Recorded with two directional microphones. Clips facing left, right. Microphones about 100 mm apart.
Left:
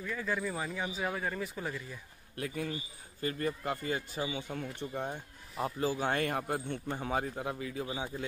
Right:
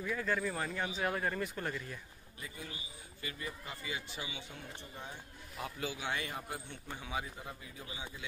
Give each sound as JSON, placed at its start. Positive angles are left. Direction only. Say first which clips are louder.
{"t": 0.0, "sound": "speech", "louder": "even", "side_deg": 0}
{"t": 2.3, "sound": "a man's voice", "louder": "left 11 dB", "side_deg": 65}
{"t": 2.7, "sound": "speech", "louder": "left 8 dB", "side_deg": 40}
{"t": 5.6, "sound": "speech", "louder": "left 8 dB", "side_deg": 40}
{"t": 7.9, "sound": "speech", "louder": "left 8 dB", "side_deg": 45}